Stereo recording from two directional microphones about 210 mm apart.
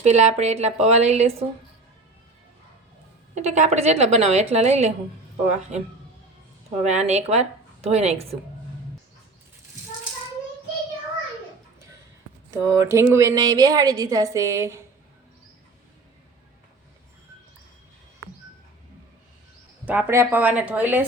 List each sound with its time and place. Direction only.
0.0 s a woman's voice: 30° right (ahead or behind)
3.3 s a woman's voice: 35° right (ahead or behind)
6.8 s a woman's voice: 30° right (ahead or behind)
12.5 s a woman's voice: 15° right (ahead or behind)
19.8 s a woman's voice: 10° right (ahead or behind)